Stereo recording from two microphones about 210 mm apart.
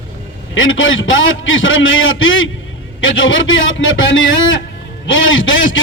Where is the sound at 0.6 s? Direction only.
70° left (ahead or behind).